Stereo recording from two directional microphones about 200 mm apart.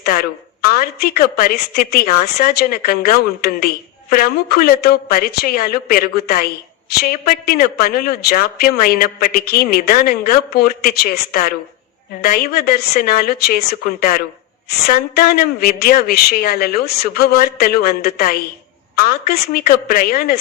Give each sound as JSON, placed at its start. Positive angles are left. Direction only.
{"t": 0.0, "sound": "a woman's voice", "side_deg": 50}